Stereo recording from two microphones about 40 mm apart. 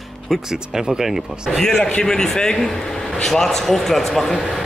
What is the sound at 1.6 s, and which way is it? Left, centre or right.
Speech, centre.